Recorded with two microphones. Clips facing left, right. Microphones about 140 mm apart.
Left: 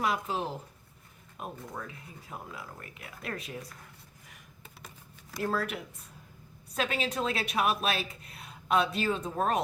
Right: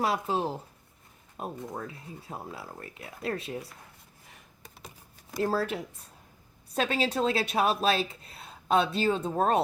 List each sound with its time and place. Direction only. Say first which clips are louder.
0.0 s a woman's voice: right 3 dB; 30° right (ahead or behind)
5.4 s a woman's voice: right 4 dB; 30° right (ahead or behind)